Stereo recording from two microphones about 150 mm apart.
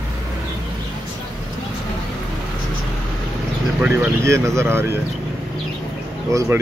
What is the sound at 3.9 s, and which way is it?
Speech, 20° right (ahead or behind).